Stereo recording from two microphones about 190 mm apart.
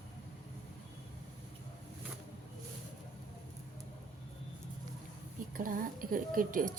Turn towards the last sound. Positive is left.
turn(degrees=-45)  # may be behind; listen again after turning